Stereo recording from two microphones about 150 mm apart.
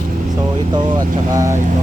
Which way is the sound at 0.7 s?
30° right (ahead or behind).